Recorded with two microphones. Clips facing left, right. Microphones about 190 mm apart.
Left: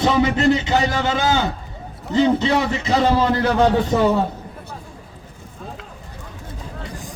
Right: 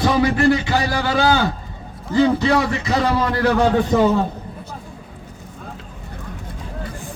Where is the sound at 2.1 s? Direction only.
20° left (ahead or behind).